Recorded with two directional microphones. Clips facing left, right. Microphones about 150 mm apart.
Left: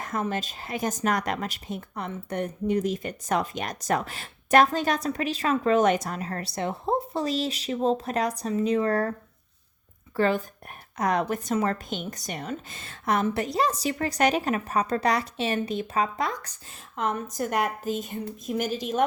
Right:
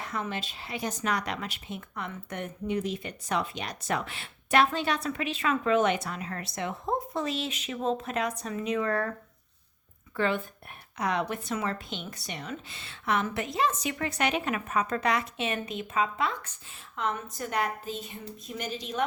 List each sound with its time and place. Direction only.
0.0 s speech: 45° left (ahead or behind)
10.2 s speech: 40° left (ahead or behind)